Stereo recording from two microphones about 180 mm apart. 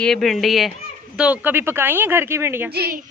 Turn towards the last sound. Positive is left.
turn(degrees=-55)  # may be behind; listen again after turning